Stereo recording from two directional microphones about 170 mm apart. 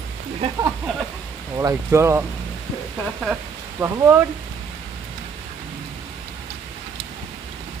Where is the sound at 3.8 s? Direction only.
15° right (ahead or behind).